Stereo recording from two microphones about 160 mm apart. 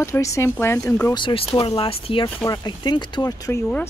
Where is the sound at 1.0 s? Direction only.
30° left (ahead or behind).